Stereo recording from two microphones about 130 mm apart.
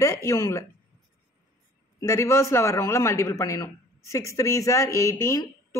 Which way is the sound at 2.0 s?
20° left (ahead or behind).